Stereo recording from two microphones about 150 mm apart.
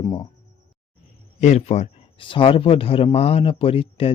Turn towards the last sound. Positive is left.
turn(degrees=40)  # may be behind; listen again after turning